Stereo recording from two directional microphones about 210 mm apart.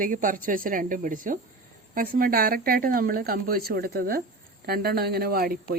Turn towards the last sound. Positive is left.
turn(degrees=-45)  # may be behind; listen again after turning